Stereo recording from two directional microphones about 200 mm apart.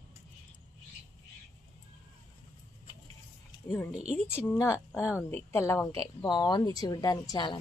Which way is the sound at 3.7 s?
10° left (ahead or behind).